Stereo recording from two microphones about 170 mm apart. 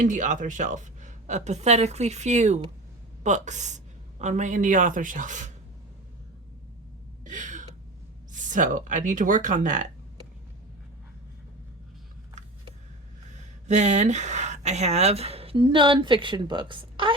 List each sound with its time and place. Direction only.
0.0 s a woman's voice: 45° right (ahead or behind)
7.3 s gasp: 45° right (ahead or behind)
8.3 s a woman's voice: 50° right (ahead or behind)
13.3 s speech: 45° right (ahead or behind)